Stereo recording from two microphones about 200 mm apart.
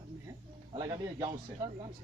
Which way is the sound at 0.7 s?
20° right (ahead or behind).